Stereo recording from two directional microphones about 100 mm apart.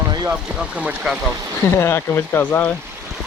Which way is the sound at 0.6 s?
10° right (ahead or behind).